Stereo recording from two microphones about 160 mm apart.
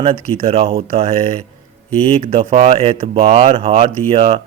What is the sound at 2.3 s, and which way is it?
Speech, 35° right (ahead or behind).